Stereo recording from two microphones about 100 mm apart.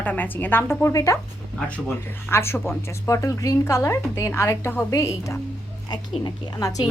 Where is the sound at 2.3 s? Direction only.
25° left (ahead or behind).